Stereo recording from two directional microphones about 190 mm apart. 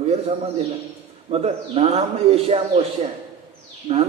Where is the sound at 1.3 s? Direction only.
35° right (ahead or behind).